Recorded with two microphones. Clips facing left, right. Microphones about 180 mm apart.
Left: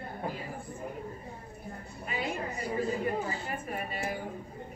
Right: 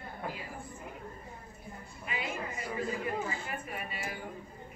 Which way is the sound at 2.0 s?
40° left (ahead or behind).